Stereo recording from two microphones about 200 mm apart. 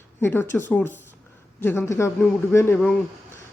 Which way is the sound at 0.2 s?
10° left (ahead or behind).